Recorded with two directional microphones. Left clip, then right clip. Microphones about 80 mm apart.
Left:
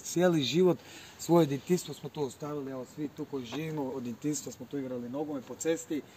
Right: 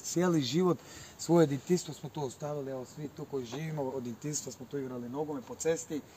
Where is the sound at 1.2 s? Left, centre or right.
Right.